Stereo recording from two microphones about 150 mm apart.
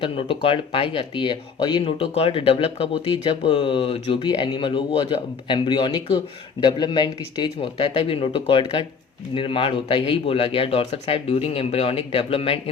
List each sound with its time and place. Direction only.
0.0 s speech: 35° left (ahead or behind)